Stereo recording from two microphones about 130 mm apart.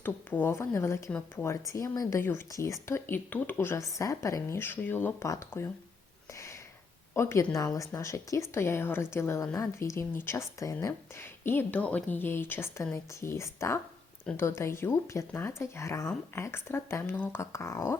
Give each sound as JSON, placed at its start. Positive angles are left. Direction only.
{"t": 0.0, "sound": "speech", "side_deg": 15}
{"t": 6.3, "sound": "a sound", "side_deg": 20}
{"t": 7.1, "sound": "speech", "side_deg": 20}